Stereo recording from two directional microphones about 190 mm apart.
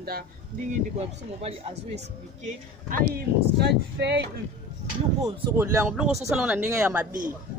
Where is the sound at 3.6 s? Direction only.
60° right (ahead or behind).